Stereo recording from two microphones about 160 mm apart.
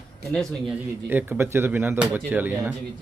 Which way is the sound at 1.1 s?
10° right (ahead or behind).